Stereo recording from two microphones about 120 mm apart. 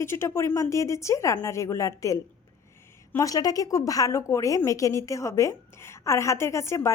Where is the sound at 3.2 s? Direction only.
30° left (ahead or behind).